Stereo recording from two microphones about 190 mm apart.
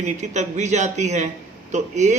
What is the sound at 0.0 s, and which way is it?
A man's voice, 40° right (ahead or behind).